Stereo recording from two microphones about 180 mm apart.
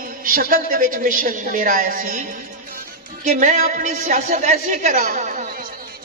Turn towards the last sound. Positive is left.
turn(degrees=-45)  # may be behind; listen again after turning